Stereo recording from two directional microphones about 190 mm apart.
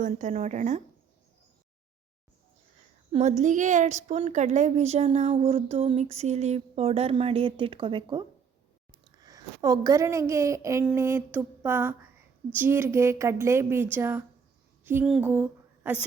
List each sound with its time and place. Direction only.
0.0 s a woman's voice: 40° right (ahead or behind)
3.1 s a woman's voice: 35° right (ahead or behind); by 14.3 s 10° right (ahead or behind)
14.8 s a sound: 5° right (ahead or behind)